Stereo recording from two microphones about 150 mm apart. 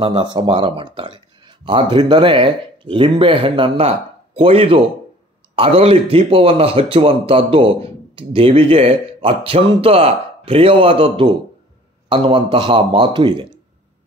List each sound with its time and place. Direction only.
0.0 s a man's voice: 35° right (ahead or behind)